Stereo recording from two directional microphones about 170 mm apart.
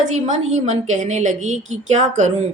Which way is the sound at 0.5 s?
40° right (ahead or behind).